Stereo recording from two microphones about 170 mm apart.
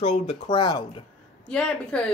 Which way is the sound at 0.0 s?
35° left (ahead or behind).